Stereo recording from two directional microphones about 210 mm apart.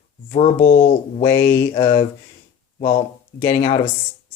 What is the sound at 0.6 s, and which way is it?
Speech, 40° left (ahead or behind).